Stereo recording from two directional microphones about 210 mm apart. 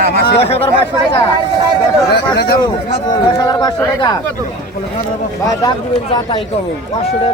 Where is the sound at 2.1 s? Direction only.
50° left (ahead or behind).